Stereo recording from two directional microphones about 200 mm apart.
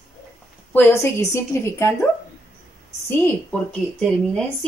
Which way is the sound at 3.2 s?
5° left (ahead or behind).